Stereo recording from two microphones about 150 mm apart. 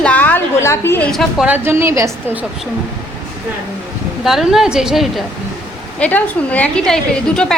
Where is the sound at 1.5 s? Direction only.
15° right (ahead or behind).